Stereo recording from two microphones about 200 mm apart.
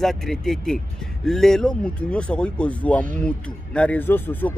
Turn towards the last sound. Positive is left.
turn(degrees=10)  # may be behind; listen again after turning